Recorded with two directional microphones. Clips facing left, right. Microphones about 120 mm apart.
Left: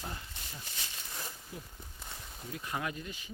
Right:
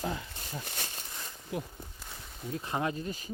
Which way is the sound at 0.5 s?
55° right (ahead or behind).